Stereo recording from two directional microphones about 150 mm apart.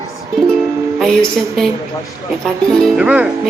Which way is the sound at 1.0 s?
5° left (ahead or behind).